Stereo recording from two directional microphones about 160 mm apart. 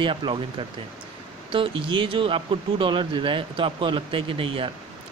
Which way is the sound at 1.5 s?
35° right (ahead or behind).